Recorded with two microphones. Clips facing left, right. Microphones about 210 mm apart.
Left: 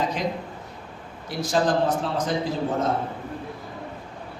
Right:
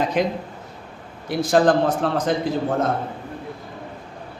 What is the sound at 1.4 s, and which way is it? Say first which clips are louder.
Speech: right 5 dB; 55° right (ahead or behind).